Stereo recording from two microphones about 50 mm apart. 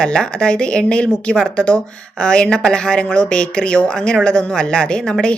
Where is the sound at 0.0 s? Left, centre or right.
Centre.